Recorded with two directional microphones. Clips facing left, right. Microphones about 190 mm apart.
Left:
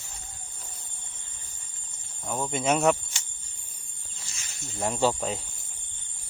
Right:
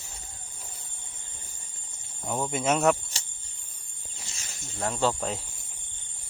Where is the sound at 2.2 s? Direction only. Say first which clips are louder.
Even; 10° right (ahead or behind).